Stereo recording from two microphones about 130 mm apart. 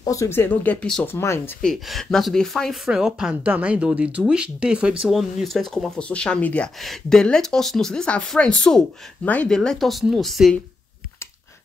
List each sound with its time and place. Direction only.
0.0 s speech: 25° left (ahead or behind); by 1.0 s 10° left (ahead or behind)
1.0 s speech: 20° left (ahead or behind)
1.6 s speech: 5° left (ahead or behind)